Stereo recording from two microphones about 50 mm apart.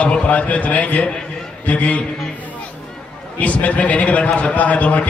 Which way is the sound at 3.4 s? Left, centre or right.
Left.